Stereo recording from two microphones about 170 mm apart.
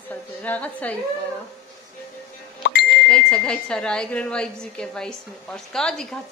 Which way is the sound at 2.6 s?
75° left (ahead or behind).